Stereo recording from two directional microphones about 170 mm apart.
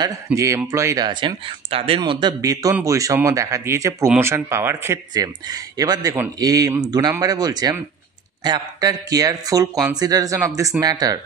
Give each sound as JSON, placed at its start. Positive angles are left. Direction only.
{"t": 0.0, "sound": "speech", "side_deg": -20}